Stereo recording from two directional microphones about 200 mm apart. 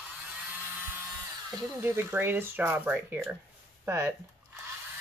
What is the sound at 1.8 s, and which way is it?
Speech, 10° right (ahead or behind).